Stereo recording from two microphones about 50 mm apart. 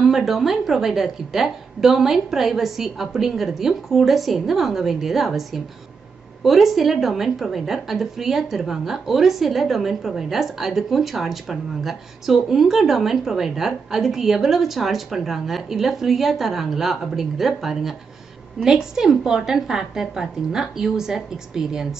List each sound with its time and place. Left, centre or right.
0.0 s a woman's voice: centre